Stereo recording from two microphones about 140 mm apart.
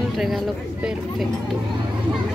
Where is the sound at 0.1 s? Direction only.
Centre (ahead or behind).